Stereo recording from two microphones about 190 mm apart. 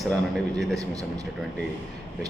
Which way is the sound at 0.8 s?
20° right (ahead or behind).